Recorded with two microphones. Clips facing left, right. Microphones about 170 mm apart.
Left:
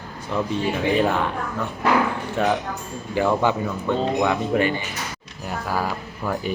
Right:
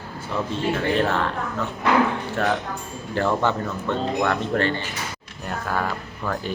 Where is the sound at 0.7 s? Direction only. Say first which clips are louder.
Left 1 dB; centre (ahead or behind).